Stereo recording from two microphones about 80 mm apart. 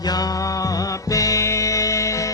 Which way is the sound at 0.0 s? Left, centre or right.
Left.